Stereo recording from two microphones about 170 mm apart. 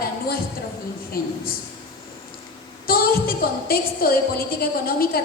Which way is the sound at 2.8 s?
60° left (ahead or behind).